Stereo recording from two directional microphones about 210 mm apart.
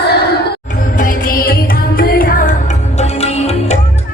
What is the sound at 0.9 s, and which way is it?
Music, 40° left (ahead or behind).